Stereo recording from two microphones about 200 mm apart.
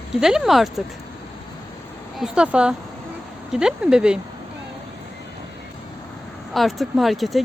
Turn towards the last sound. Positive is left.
turn(degrees=0)  # may be behind; listen again after turning